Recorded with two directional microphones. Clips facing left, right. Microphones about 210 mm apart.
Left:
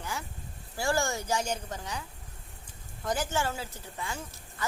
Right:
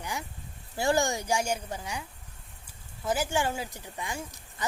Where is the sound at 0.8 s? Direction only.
20° right (ahead or behind).